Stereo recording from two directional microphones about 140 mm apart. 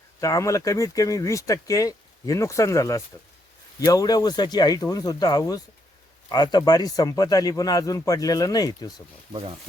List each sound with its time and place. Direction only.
0.2 s speech: 20° left (ahead or behind)
9.3 s speech: 40° right (ahead or behind)